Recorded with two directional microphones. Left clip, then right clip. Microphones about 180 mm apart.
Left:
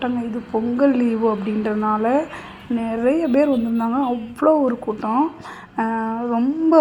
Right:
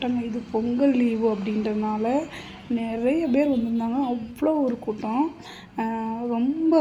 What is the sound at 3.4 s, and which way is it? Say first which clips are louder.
Speech: left 5 dB; 25° left (ahead or behind).